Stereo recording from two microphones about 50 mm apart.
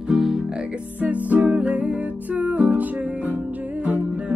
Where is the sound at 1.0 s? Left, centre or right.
Right.